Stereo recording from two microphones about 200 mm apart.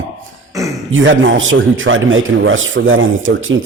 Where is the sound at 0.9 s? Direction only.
75° right (ahead or behind).